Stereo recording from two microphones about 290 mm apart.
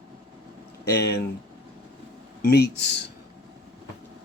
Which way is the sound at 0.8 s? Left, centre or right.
Left.